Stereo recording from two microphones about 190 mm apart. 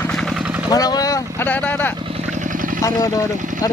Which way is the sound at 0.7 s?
20° left (ahead or behind).